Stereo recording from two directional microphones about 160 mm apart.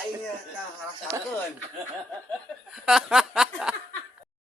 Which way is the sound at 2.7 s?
5° right (ahead or behind).